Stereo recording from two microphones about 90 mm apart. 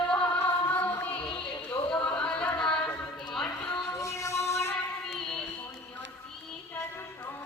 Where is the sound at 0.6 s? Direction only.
20° left (ahead or behind).